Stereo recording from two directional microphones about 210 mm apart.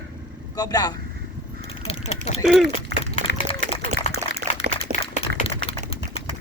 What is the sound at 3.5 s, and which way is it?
Run, 25° left (ahead or behind).